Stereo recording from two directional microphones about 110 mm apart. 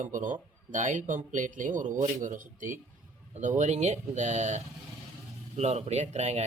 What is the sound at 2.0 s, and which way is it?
Speech, 90° right.